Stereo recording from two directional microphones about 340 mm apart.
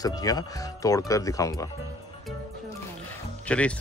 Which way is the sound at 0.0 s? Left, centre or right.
Centre.